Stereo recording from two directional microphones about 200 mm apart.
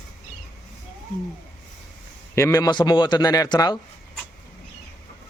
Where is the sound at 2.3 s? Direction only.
15° left (ahead or behind).